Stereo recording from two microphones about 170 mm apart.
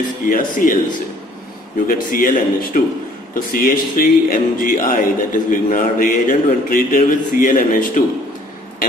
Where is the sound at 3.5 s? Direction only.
55° left (ahead or behind).